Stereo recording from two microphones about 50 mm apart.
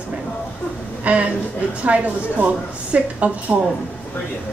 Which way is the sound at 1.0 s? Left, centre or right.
Right.